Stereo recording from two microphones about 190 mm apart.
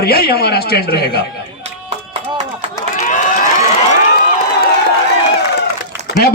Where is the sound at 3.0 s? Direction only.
40° left (ahead or behind).